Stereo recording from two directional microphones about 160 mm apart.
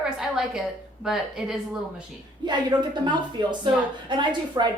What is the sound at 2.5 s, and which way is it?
Speech, 30° right (ahead or behind).